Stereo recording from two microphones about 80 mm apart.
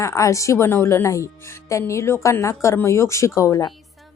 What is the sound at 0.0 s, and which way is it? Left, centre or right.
Speech, left.